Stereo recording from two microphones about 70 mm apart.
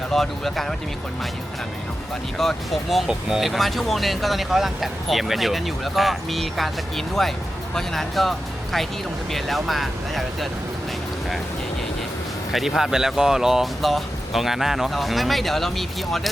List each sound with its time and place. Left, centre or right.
0.1 s speech: centre
2.4 s speech: centre
3.1 s speech: centre
12.5 s speech: centre